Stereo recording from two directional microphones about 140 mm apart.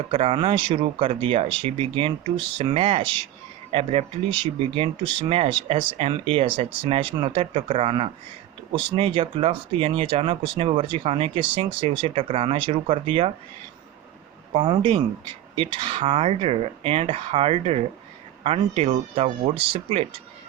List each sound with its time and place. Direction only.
0.1 s speech: 45° right (ahead or behind)
14.5 s speech: 35° right (ahead or behind)